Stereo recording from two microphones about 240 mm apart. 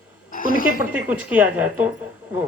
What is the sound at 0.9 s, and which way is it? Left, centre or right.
Speech, centre.